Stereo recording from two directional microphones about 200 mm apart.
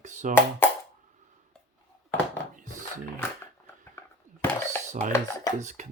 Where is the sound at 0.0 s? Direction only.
40° right (ahead or behind).